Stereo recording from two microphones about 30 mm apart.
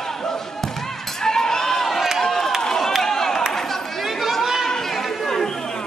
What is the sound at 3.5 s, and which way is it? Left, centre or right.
Chatter, centre.